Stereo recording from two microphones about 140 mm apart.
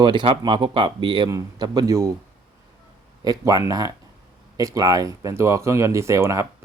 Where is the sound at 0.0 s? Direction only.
35° right (ahead or behind).